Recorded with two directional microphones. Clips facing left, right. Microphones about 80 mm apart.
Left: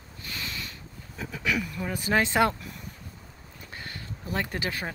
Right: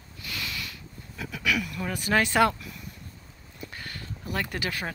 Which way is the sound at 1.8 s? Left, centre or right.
Left.